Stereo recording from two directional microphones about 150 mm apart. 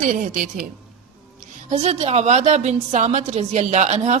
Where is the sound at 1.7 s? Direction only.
45° right (ahead or behind).